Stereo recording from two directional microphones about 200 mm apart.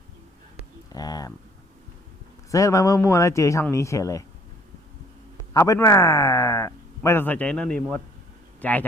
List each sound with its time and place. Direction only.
0.9 s speech: 20° left (ahead or behind)
2.5 s speech: 15° left (ahead or behind)
5.5 s speech: 15° left (ahead or behind)